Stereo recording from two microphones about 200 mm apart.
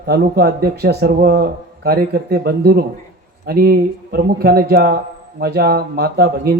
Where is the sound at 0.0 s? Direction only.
55° right (ahead or behind).